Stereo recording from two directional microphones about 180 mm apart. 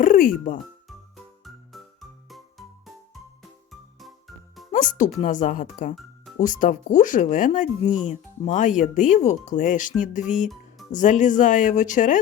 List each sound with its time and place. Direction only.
0.0 s speech: 50° left (ahead or behind)
0.9 s music: centre (ahead or behind)
3.7 s music for children: centre (ahead or behind)
4.7 s speech: 45° left (ahead or behind)